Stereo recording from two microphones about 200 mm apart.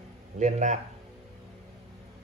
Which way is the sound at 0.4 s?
35° right (ahead or behind).